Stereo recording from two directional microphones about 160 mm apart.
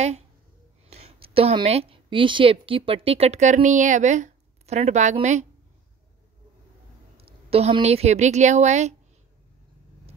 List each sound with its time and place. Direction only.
0.8 s a woman's voice: 40° right (ahead or behind)
7.2 s a woman's voice: 35° right (ahead or behind)